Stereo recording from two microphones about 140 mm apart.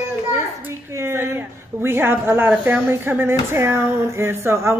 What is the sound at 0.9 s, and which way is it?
A woman's voice, 20° right (ahead or behind).